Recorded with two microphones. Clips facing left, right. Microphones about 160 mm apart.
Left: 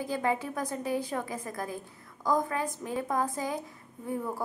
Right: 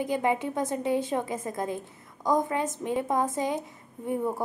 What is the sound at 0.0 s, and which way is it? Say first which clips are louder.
A woman's voice: right 4 dB; 20° right (ahead or behind).